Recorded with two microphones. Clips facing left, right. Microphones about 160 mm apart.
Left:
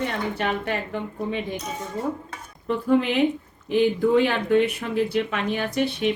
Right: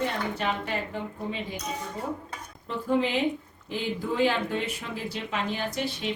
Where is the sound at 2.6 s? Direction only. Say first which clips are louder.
Left 5 dB; 65° left (ahead or behind).